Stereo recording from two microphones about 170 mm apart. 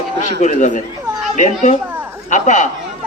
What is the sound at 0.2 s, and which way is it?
Speech, 45° left (ahead or behind).